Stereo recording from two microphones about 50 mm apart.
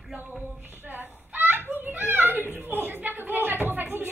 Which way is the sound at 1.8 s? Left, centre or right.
Right.